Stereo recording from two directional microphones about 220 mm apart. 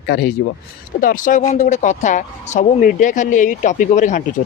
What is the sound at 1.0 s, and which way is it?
Speech, 35° left (ahead or behind).